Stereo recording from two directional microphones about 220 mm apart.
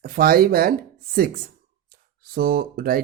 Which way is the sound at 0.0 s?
40° right (ahead or behind).